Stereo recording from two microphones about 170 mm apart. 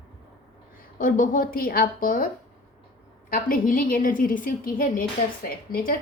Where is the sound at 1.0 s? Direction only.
55° left (ahead or behind).